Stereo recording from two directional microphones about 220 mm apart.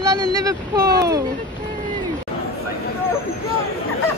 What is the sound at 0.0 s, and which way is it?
Speech, 15° right (ahead or behind).